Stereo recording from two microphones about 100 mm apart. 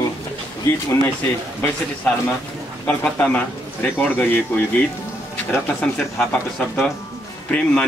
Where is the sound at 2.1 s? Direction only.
10° left (ahead or behind).